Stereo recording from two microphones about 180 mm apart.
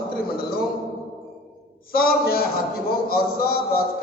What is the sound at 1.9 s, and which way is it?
A man's voice, 55° left (ahead or behind).